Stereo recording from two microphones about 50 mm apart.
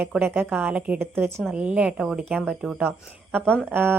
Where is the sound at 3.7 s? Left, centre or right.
Right.